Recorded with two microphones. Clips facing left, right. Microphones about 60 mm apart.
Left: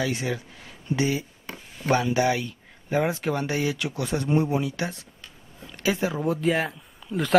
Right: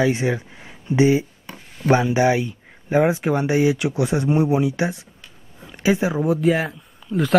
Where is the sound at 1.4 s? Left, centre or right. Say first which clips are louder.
Right 6 dB; centre.